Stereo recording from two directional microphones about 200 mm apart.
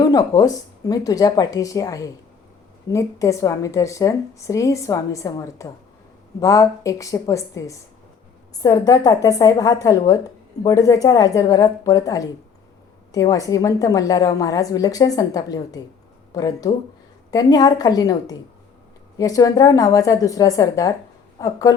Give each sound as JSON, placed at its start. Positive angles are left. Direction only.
{"t": 0.0, "sound": "a woman's voice", "side_deg": 20}